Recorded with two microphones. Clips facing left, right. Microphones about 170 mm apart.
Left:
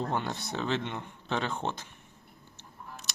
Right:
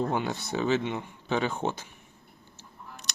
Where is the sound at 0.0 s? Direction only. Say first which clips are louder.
Right 4 dB; 5° right (ahead or behind).